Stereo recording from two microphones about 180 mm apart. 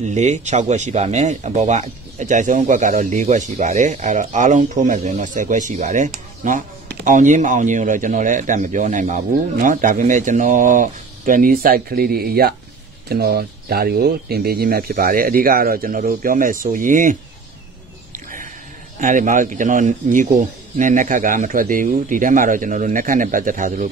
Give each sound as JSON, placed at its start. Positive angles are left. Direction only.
{"t": 0.0, "sound": "speech", "side_deg": -40}
{"t": 18.1, "sound": "a sound", "side_deg": -50}
{"t": 18.9, "sound": "speech", "side_deg": -45}